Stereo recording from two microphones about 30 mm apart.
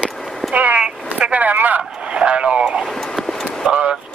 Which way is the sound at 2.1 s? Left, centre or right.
Right.